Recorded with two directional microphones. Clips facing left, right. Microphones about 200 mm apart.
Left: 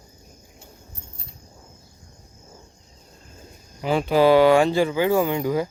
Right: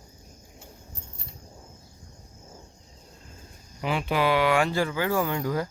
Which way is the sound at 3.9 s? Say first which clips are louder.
Left 8 dB; 35° left (ahead or behind).